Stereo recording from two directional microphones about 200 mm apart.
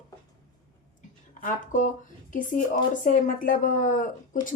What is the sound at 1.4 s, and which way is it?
Speech, 40° left (ahead or behind).